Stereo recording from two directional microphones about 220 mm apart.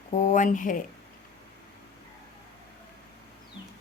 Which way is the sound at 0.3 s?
35° left (ahead or behind).